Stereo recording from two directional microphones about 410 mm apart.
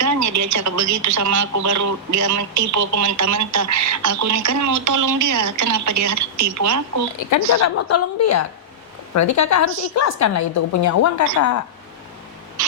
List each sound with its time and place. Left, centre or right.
0.0 s speech: right
7.2 s a woman's voice: left